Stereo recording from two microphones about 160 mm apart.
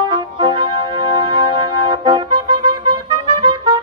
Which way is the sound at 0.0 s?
30° right (ahead or behind).